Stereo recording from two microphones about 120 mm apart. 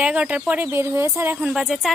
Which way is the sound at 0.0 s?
10° right (ahead or behind).